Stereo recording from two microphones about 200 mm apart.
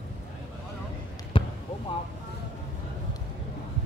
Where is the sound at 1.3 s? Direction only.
25° left (ahead or behind).